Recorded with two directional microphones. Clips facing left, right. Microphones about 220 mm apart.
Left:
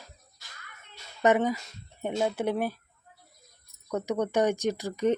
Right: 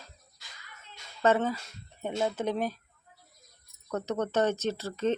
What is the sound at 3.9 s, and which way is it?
Speech, 10° left (ahead or behind).